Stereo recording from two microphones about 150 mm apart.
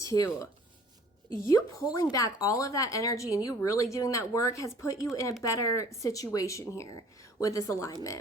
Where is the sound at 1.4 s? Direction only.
20° left (ahead or behind).